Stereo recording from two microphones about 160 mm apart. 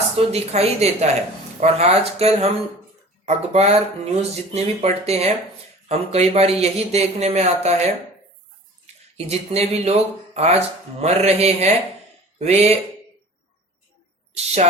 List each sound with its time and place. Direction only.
0.2 s speech: 40° right (ahead or behind)
9.1 s speech: 40° right (ahead or behind)
14.3 s speech: 45° right (ahead or behind)